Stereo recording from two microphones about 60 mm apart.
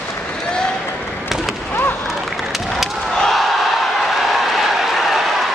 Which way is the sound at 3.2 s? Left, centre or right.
Centre.